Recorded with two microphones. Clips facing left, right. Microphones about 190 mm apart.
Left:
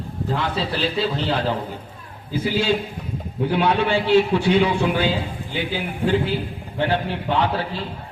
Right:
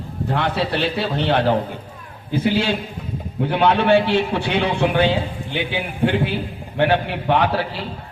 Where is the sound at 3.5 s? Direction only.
60° right (ahead or behind).